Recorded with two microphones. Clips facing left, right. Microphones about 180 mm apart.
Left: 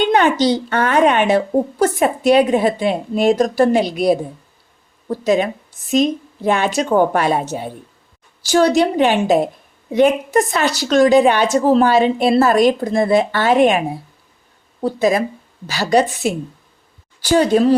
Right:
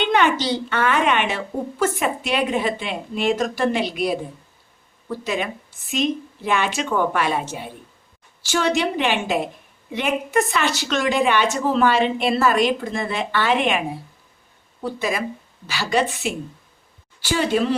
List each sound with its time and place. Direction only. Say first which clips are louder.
0.0 s speech: left 5 dB; 40° left (ahead or behind)
14.8 s speech: left 8 dB; 40° left (ahead or behind)